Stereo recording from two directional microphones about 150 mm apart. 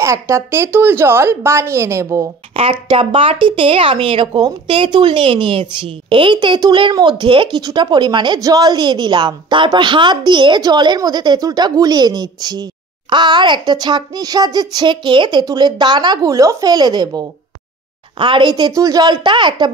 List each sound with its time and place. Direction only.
0.0 s a woman's voice: 20° right (ahead or behind)
2.5 s a woman's voice: 35° right (ahead or behind)